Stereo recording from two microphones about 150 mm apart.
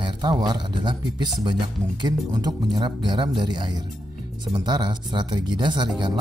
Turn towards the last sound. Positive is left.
turn(degrees=-30)  # may be behind; listen again after turning